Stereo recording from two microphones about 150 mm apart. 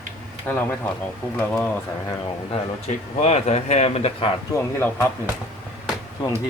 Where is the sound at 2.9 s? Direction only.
50° left (ahead or behind).